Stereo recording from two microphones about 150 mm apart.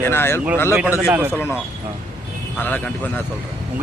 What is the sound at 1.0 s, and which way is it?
Speech, 10° right (ahead or behind).